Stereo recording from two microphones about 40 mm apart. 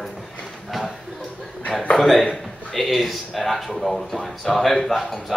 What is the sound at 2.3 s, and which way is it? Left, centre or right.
A man's voice, centre.